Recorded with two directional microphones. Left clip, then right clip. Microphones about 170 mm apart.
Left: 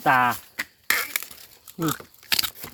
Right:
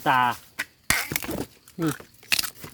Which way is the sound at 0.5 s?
5° right (ahead or behind).